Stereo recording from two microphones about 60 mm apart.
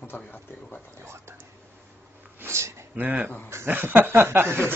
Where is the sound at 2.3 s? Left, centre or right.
Right.